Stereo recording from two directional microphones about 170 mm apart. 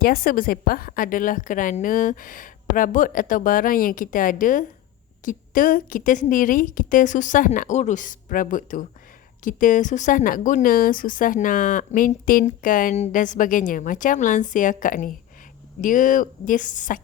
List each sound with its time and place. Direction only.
0.0 s a woman's voice: 60° left (ahead or behind)